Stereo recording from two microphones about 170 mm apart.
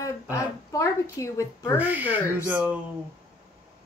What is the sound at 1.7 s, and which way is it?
Speech, 10° right (ahead or behind).